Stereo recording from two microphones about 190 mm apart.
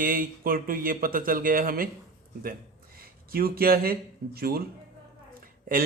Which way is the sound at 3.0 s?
50° right (ahead or behind).